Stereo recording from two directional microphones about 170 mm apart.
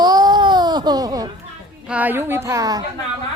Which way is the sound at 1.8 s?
10° right (ahead or behind).